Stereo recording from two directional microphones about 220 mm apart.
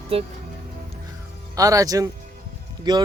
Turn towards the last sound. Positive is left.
turn(degrees=-15)  # may be behind; listen again after turning